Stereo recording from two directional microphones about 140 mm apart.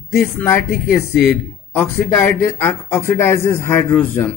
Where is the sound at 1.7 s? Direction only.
15° left (ahead or behind).